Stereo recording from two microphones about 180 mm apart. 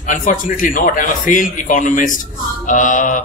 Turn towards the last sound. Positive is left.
turn(degrees=45)  # may be behind; listen again after turning